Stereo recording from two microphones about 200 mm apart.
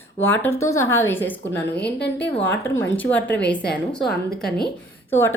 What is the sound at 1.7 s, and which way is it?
Speech, 55° left (ahead or behind).